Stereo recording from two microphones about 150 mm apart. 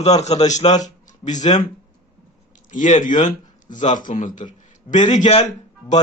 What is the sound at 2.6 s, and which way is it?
Speech, 55° left (ahead or behind).